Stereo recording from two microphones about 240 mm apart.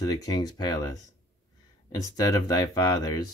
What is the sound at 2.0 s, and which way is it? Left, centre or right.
Speech, centre.